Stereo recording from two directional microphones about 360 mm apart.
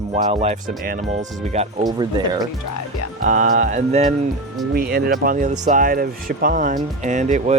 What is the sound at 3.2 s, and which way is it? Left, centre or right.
Speech, right.